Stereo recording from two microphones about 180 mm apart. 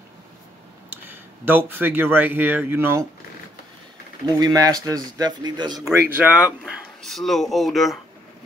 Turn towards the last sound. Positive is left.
turn(degrees=0)  # may be behind; listen again after turning